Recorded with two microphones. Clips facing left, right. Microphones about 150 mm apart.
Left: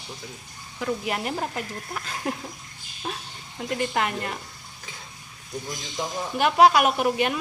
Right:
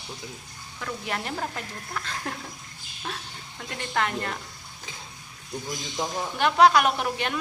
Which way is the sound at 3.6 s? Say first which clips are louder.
Left 3 dB; 15° left (ahead or behind).